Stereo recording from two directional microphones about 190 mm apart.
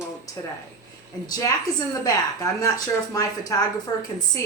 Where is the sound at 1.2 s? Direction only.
20° left (ahead or behind).